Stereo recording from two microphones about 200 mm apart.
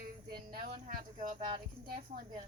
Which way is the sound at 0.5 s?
45° right (ahead or behind).